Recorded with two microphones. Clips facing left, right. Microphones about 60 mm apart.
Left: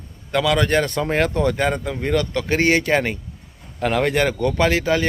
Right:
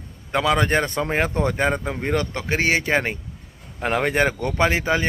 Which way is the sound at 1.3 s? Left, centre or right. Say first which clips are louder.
Left 2 dB; right.